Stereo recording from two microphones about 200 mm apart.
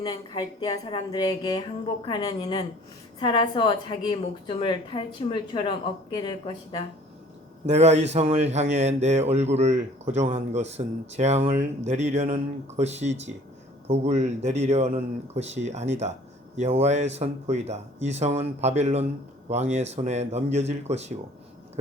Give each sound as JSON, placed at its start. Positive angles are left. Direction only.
{"t": 0.0, "sound": "a woman's voice", "side_deg": 20}
{"t": 7.7, "sound": "speech", "side_deg": -35}